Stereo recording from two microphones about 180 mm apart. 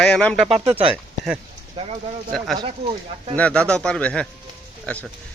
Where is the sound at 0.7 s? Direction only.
30° right (ahead or behind).